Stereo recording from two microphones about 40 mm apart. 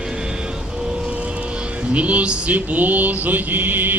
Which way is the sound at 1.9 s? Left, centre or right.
Right.